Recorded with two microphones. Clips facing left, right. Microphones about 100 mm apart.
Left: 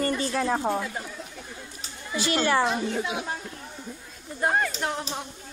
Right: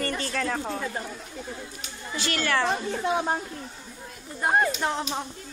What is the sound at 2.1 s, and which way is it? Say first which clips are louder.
Speech: left 3 dB; 20° left (ahead or behind).